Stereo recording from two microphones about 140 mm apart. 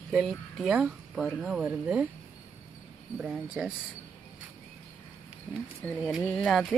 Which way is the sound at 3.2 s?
5° right (ahead or behind).